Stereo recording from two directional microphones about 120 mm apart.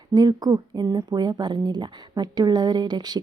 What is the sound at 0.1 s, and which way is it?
Speech, 30° right (ahead or behind).